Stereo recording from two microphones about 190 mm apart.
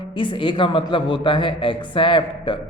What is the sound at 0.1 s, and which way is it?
A man's voice, 25° left (ahead or behind).